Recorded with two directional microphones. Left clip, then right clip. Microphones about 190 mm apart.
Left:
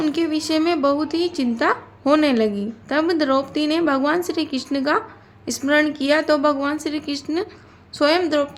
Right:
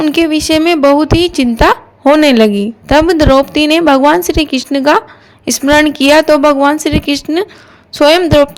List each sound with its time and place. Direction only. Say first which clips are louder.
0.0 s a woman's voice: right 10 dB; 40° right (ahead or behind)